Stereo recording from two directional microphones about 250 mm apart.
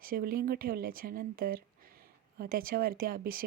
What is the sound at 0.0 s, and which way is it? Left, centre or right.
Speech, right.